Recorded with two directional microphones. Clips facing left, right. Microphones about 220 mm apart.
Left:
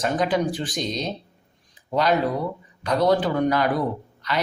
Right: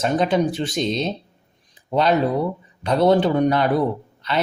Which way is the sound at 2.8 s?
25° right (ahead or behind).